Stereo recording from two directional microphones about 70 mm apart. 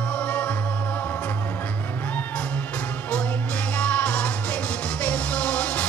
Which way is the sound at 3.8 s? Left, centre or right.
Centre.